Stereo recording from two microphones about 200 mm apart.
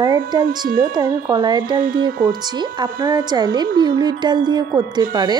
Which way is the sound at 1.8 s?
45° right (ahead or behind).